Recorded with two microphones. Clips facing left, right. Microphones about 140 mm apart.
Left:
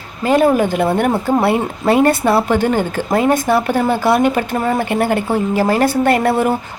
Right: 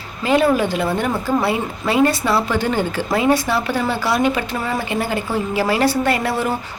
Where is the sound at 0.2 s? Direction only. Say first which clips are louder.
Left 3 dB; 45° left (ahead or behind).